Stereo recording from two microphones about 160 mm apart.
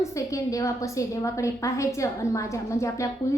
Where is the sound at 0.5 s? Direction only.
20° left (ahead or behind).